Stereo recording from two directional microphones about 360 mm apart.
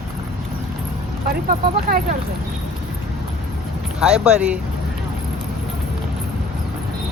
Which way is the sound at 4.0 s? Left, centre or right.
Centre.